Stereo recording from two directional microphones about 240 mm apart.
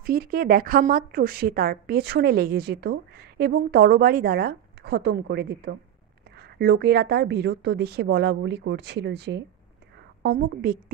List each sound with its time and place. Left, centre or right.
0.0 s a woman's voice: right